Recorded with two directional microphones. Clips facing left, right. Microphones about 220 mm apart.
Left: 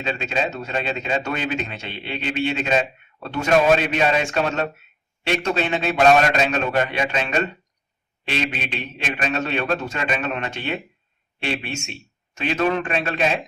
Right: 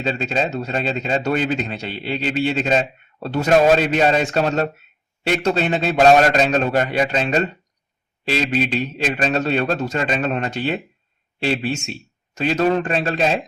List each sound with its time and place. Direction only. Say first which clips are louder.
0.0 s a man's voice: right 3 dB; 35° right (ahead or behind)